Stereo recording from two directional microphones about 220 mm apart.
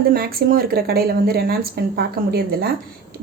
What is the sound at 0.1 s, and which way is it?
A woman's voice, 45° right (ahead or behind).